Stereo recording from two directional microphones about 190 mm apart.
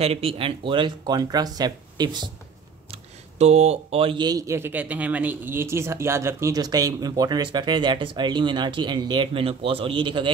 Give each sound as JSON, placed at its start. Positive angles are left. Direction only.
{"t": 0.0, "sound": "speech", "side_deg": -30}
{"t": 2.9, "sound": "speech", "side_deg": -35}